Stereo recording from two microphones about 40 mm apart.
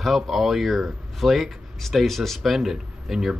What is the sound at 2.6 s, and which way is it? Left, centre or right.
Speech, centre.